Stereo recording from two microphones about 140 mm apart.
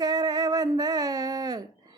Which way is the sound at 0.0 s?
30° right (ahead or behind).